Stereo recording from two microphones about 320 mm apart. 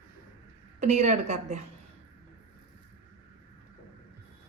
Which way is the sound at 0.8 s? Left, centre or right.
Right.